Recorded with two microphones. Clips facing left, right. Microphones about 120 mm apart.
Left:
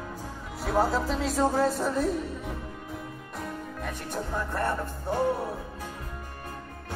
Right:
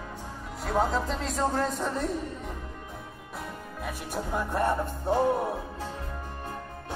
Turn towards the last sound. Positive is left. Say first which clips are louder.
# right 3 dB
turn(degrees=-25)  # may be behind; listen again after turning